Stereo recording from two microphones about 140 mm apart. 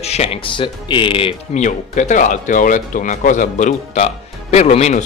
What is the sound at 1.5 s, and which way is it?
Speech, 60° left (ahead or behind).